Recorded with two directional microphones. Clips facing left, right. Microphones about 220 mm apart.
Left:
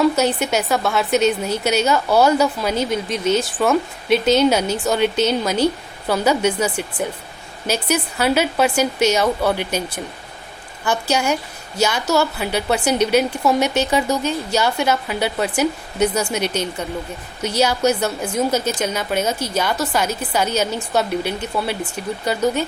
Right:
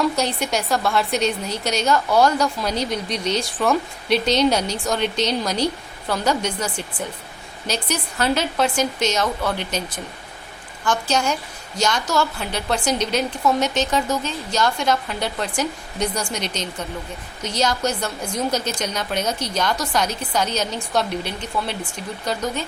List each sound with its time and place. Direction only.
0.0 s a woman's voice: 5° left (ahead or behind)